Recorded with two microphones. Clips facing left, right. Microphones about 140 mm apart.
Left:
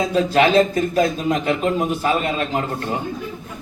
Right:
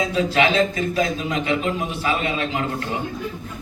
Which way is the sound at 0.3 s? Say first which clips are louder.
Left 5 dB; 50° left (ahead or behind).